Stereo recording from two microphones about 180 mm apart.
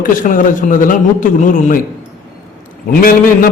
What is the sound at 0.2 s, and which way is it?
Speech, 45° left (ahead or behind).